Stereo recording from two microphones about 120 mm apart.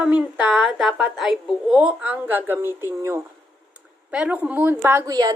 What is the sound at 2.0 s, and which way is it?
Speech, 15° right (ahead or behind).